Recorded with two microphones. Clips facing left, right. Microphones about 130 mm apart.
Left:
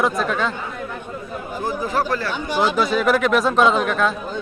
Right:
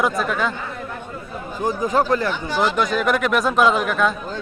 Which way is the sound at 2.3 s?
15° left (ahead or behind).